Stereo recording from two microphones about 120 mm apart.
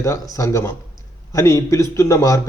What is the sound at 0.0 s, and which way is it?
A man's voice, 30° left (ahead or behind).